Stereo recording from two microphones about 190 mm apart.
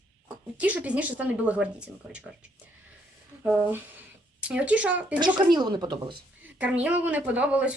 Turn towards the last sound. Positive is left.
turn(degrees=-5)  # may be behind; listen again after turning